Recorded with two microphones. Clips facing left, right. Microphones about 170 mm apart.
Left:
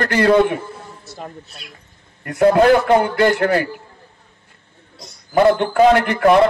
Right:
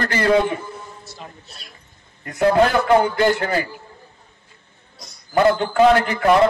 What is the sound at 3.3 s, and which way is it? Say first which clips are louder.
Speech: left 5 dB; 60° left (ahead or behind).